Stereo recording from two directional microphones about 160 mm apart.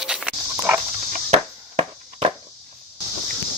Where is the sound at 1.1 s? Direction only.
40° right (ahead or behind).